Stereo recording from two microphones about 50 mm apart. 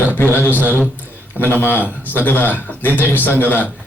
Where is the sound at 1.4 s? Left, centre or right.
Left.